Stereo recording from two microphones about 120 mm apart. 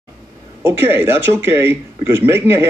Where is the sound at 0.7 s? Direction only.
20° right (ahead or behind).